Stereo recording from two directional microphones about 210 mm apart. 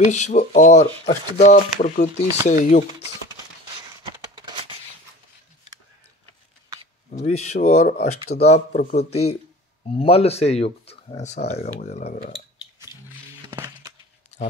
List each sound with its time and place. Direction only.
0.1 s speech: 35° left (ahead or behind)
4.0 s a sound: 20° right (ahead or behind)
7.1 s speech: 35° left (ahead or behind)
12.7 s wild animals: 15° right (ahead or behind)